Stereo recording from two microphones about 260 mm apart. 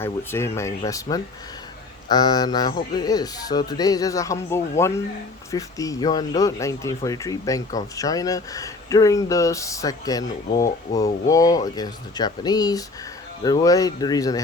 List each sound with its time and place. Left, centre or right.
0.0 s speech: centre